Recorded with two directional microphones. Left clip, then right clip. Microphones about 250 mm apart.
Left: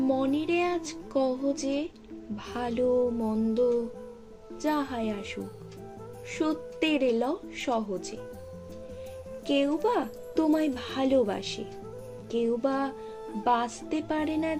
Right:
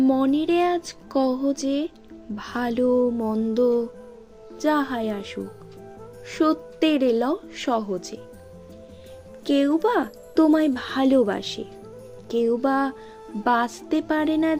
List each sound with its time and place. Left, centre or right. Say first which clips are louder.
0.0 s speech: right 6 dB; right
9.5 s speech: right 5 dB; right